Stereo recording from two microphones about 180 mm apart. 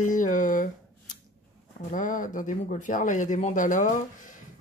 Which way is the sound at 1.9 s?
45° left (ahead or behind).